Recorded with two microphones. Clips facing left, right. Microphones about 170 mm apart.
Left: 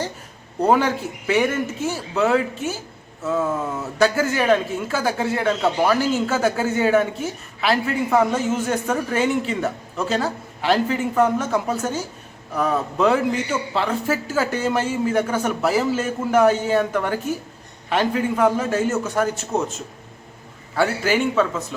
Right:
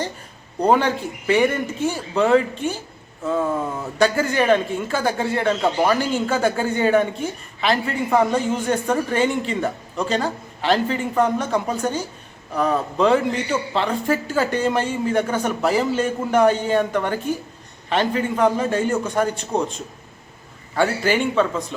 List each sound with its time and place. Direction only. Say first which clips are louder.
0.6 s speech: even; 5° left (ahead or behind)